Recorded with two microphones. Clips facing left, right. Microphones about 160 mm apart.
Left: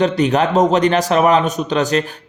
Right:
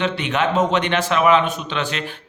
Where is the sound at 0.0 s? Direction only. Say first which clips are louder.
Left 6 dB; 40° left (ahead or behind).